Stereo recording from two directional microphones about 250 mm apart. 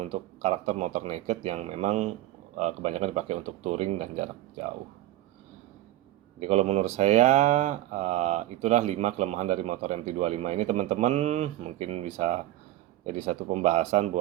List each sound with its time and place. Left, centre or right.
0.0 s speech: right
6.4 s speech: right